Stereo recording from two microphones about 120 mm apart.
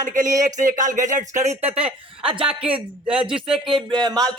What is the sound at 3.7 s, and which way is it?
Speech, 40° right (ahead or behind).